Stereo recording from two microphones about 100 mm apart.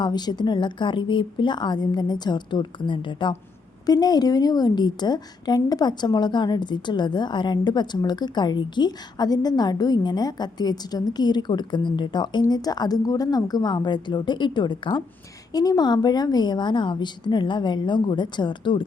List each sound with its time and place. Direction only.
0.0 s a woman's voice: 45° left (ahead or behind)
3.8 s a woman's voice: 40° left (ahead or behind)